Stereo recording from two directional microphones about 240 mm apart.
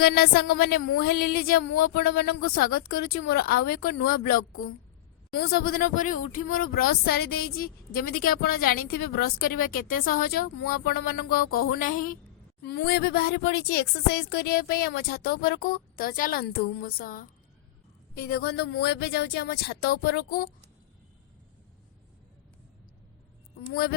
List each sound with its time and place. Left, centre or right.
0.0 s speech: left